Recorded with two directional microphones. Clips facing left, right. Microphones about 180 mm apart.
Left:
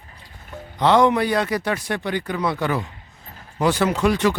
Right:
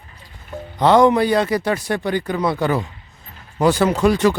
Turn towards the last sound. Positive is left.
turn(degrees=-35)  # may be behind; listen again after turning